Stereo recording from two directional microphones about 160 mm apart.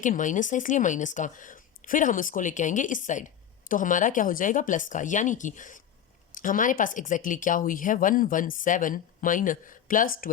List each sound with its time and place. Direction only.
0.0 s speech: 55° left (ahead or behind)